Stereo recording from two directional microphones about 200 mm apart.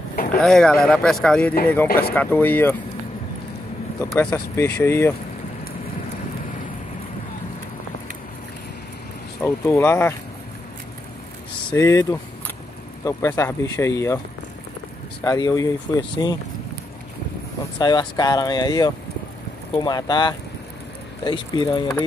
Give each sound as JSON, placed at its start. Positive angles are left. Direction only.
{"t": 0.1, "sound": "a sound", "side_deg": 45}
{"t": 0.4, "sound": "speech", "side_deg": 5}
{"t": 4.1, "sound": "speech", "side_deg": 10}
{"t": 9.4, "sound": "speech", "side_deg": 10}
{"t": 11.7, "sound": "speech", "side_deg": 15}
{"t": 15.2, "sound": "speech", "side_deg": 15}
{"t": 17.7, "sound": "speech", "side_deg": 20}